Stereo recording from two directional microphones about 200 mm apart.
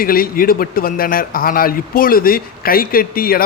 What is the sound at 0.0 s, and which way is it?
A man's voice, 45° left (ahead or behind).